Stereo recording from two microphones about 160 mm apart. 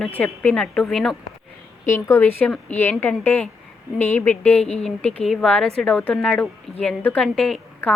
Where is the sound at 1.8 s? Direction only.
15° left (ahead or behind).